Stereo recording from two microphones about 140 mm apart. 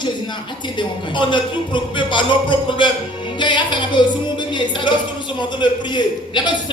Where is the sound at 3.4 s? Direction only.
35° left (ahead or behind).